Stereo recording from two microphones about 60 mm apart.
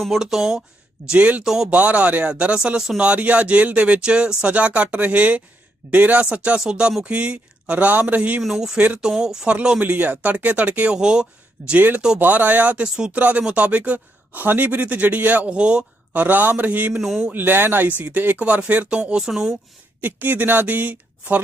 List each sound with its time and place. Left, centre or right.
0.0 s speech: centre
1.0 s speech: centre
1.5 s speech: centre
1.7 s speech: right
8.4 s speech: centre; by 10.9 s right
10.9 s speech: centre
11.7 s speech: right
15.4 s speech: centre
16.2 s speech: right
16.9 s speech: centre
17.3 s speech: right
18.3 s speech: right
20.0 s speech: right